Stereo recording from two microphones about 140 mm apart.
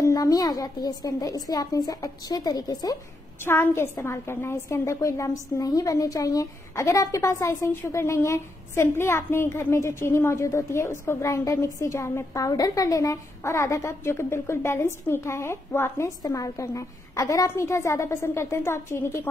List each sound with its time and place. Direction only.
0.0 s a woman's voice: 25° left (ahead or behind)
3.4 s a woman's voice: 15° left (ahead or behind)